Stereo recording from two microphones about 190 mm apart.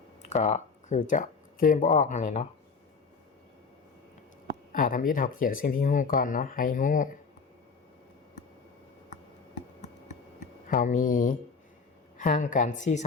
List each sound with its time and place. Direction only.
0.3 s speech: 35° left (ahead or behind)
4.7 s speech: 45° left (ahead or behind)
9.8 s computer keyboard: 40° left (ahead or behind)
12.1 s a woman's voice: 40° left (ahead or behind)